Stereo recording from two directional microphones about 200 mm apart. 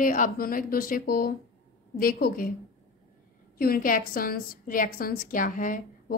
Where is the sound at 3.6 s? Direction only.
45° left (ahead or behind).